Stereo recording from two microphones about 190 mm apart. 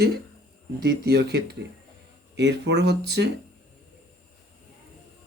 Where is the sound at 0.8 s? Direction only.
60° right (ahead or behind).